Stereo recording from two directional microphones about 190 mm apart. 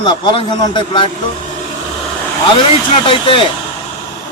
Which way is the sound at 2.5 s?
30° left (ahead or behind).